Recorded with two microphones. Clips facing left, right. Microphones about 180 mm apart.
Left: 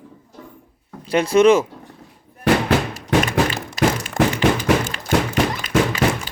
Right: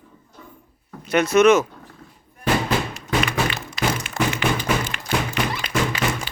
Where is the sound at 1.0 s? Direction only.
30° left (ahead or behind).